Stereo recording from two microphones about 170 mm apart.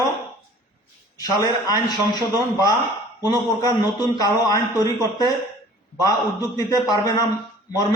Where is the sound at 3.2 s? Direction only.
25° left (ahead or behind).